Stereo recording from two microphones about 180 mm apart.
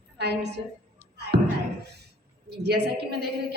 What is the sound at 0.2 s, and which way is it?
Speech, 70° right (ahead or behind).